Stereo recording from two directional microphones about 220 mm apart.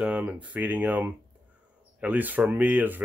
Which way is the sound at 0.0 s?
5° right (ahead or behind).